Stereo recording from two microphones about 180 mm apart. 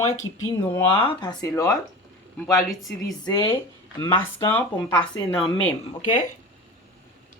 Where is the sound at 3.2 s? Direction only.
25° left (ahead or behind).